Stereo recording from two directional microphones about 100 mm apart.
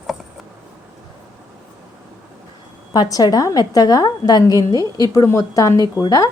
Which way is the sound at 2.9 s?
40° left (ahead or behind).